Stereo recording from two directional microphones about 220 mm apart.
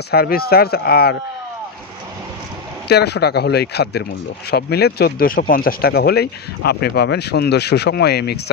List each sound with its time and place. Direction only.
0.1 s speech: 45° left (ahead or behind)
2.9 s speech: 50° left (ahead or behind)